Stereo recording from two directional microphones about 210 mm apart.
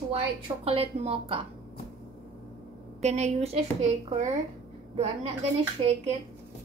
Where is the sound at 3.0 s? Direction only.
30° right (ahead or behind).